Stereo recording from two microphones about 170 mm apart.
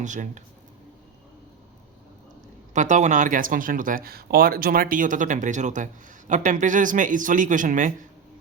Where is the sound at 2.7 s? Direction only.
45° right (ahead or behind).